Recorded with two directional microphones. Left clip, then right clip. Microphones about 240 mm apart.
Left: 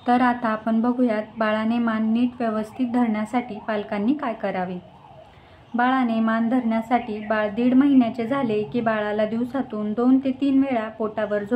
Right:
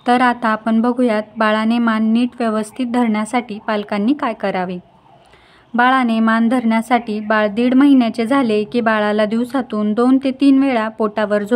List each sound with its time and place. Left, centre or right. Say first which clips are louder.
0.0 s a woman's voice: right 6 dB; right
5.8 s a woman's voice: right 7 dB; right